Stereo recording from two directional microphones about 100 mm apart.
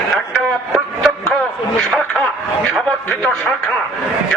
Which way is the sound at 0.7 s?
5° left (ahead or behind).